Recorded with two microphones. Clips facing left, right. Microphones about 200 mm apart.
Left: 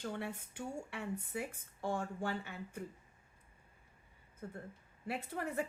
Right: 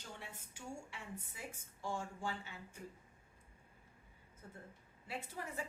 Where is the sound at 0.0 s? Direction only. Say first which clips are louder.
Left 11 dB; 65° left (ahead or behind).